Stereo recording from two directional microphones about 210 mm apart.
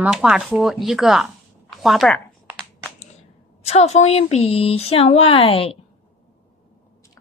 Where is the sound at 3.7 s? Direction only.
30° left (ahead or behind).